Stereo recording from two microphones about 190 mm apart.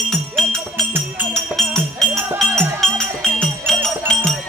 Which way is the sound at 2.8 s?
5° left (ahead or behind).